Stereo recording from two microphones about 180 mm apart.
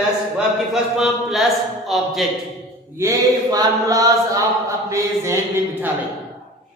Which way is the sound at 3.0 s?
20° right (ahead or behind).